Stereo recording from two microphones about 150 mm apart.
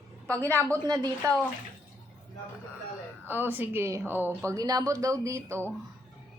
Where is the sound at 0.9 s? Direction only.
25° right (ahead or behind).